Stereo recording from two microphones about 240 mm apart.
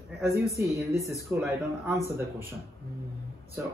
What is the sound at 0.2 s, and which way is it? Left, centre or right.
Speech, centre.